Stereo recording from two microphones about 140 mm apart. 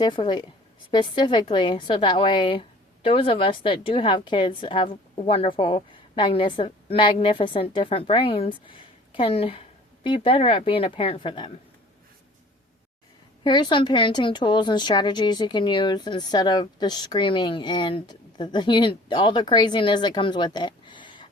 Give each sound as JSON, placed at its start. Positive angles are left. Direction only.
{"t": 0.0, "sound": "a woman's voice", "side_deg": 35}
{"t": 13.4, "sound": "a woman's voice", "side_deg": 35}